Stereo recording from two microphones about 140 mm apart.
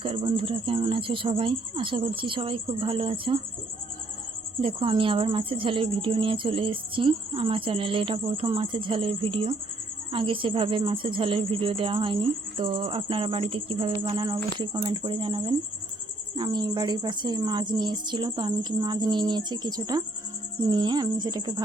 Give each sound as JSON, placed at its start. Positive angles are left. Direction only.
{"t": 0.0, "sound": "speech", "side_deg": -40}
{"t": 4.6, "sound": "speech", "side_deg": -40}